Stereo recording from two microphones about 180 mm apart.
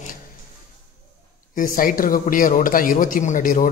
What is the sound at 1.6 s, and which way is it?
A man's voice, 50° left (ahead or behind).